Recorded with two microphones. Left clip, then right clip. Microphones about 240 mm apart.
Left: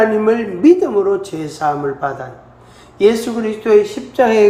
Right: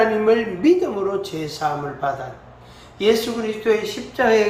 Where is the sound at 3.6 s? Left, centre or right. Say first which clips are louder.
Left 9 dB; left.